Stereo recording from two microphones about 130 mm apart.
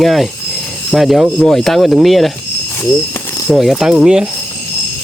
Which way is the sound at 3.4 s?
Centre (ahead or behind).